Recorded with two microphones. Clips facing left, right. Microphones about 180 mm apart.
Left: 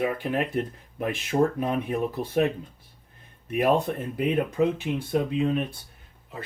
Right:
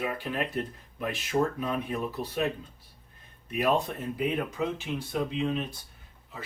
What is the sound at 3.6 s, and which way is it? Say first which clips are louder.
Speech: left 4 dB; 55° left (ahead or behind).